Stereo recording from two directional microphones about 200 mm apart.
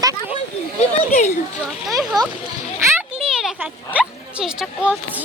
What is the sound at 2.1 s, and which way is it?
Speech, 20° right (ahead or behind).